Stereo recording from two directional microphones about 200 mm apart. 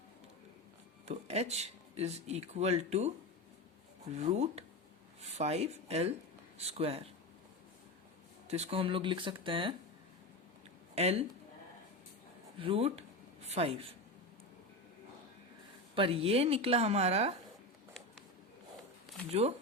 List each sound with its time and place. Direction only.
1.0 s speech: 30° right (ahead or behind)
4.2 s speech: 30° right (ahead or behind)
8.4 s a woman's voice: 30° right (ahead or behind)
10.9 s speech: 30° right (ahead or behind)
12.5 s a woman's voice: 25° right (ahead or behind)
16.0 s a woman's voice: 25° right (ahead or behind)
19.3 s speech: 30° right (ahead or behind)